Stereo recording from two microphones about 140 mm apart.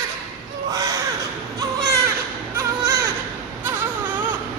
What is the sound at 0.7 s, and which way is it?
Crow, 25° right (ahead or behind).